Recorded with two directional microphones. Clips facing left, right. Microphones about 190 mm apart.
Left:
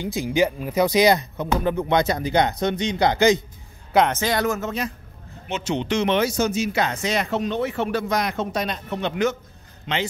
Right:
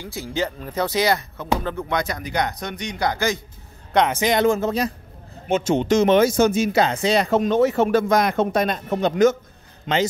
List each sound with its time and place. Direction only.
0.0 s speech: 15° left (ahead or behind)
4.1 s speech: 20° right (ahead or behind); by 4.9 s 35° right (ahead or behind)
5.5 s speech: 45° right (ahead or behind)
6.8 s speech: 30° right (ahead or behind)
7.2 s speech: 45° right (ahead or behind)